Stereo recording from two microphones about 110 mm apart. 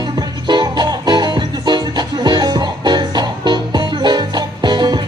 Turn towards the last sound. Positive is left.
turn(degrees=-40)  # may be behind; listen again after turning